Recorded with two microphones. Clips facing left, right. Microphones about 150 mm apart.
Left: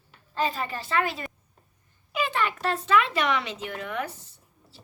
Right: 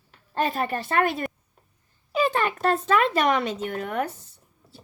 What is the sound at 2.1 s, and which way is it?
Speech, 40° right (ahead or behind).